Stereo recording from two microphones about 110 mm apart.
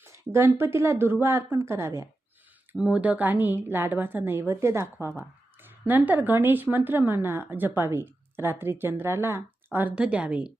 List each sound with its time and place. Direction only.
0.3 s speech: 20° right (ahead or behind)
2.7 s a woman's voice: 10° right (ahead or behind)